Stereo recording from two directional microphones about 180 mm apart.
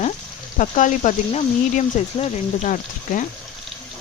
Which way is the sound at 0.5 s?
45° left (ahead or behind).